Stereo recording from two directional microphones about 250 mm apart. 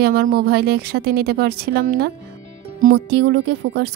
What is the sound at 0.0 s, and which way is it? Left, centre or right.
Music, right.